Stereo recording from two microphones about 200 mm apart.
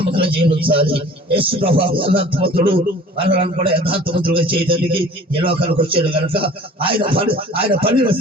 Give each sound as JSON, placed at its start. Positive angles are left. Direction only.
{"t": 0.0, "sound": "a man's voice", "side_deg": -25}